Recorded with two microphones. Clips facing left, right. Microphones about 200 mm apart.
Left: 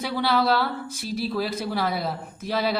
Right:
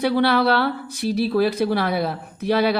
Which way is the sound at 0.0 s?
65° right (ahead or behind).